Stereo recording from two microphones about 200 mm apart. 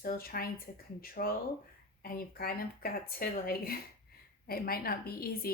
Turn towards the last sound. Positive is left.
turn(degrees=50)  # may be behind; listen again after turning